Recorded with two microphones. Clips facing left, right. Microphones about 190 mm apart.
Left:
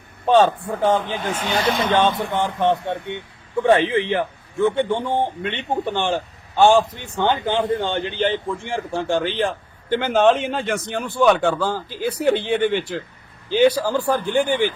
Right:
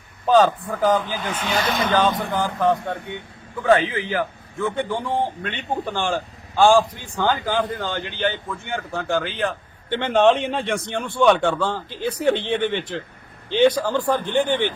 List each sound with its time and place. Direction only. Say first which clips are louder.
0.3 s a man's voice: left 1 dB; 25° left (ahead or behind)
9.9 s a man's voice: left 1 dB; 5° left (ahead or behind)